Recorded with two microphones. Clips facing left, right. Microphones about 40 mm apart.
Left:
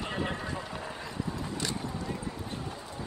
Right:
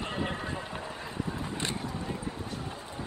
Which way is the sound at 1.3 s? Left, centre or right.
Right.